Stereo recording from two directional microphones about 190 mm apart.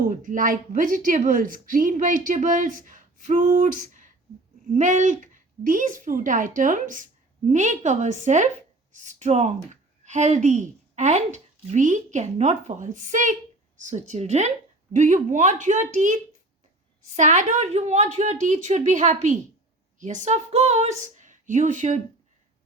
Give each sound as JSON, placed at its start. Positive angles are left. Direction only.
{"t": 0.0, "sound": "a woman's voice", "side_deg": -45}
{"t": 17.2, "sound": "speech", "side_deg": -40}